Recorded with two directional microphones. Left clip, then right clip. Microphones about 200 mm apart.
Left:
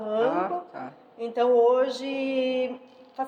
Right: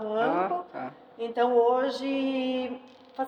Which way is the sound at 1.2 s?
35° left (ahead or behind).